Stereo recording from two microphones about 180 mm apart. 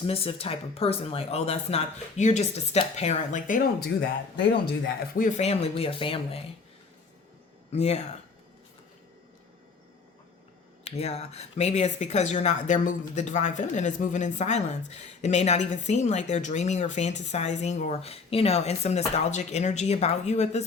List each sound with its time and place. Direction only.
0.0 s speech: 30° left (ahead or behind)
5.1 s speech: 45° left (ahead or behind)
7.7 s speech: 35° left (ahead or behind)
10.8 s speech: 35° left (ahead or behind)